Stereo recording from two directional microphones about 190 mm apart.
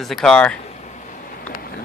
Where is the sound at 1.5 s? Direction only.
50° left (ahead or behind).